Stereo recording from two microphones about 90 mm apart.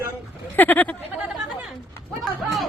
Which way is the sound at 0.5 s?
20° left (ahead or behind).